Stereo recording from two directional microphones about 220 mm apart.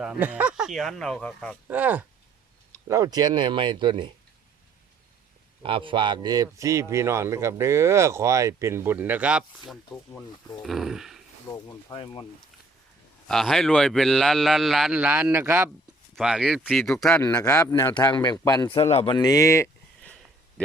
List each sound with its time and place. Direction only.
0.0 s speech: 5° right (ahead or behind)
1.6 s speech: 5° right (ahead or behind)
5.6 s speech: 25° right (ahead or behind); by 9.7 s 5° right (ahead or behind)
9.9 s speech: 10° left (ahead or behind)
10.7 s speech: centre (ahead or behind)
11.9 s speech: 20° left (ahead or behind)
13.2 s speech: centre (ahead or behind)